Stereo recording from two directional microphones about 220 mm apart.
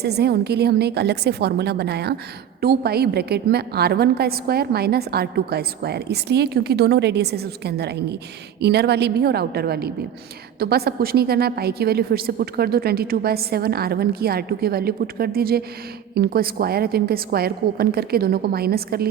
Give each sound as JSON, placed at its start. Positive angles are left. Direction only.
{"t": 0.0, "sound": "a woman's voice", "side_deg": -45}